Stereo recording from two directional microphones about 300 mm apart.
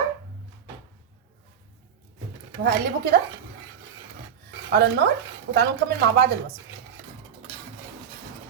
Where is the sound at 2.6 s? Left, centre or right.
Right.